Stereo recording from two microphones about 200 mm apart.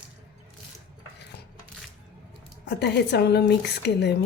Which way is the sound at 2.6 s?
55° left (ahead or behind).